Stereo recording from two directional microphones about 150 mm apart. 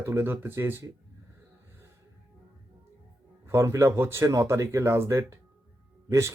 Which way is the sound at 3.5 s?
20° right (ahead or behind).